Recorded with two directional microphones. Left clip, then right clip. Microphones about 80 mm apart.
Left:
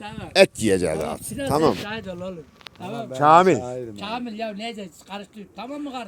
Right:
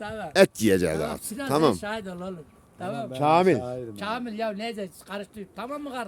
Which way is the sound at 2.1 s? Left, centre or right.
Right.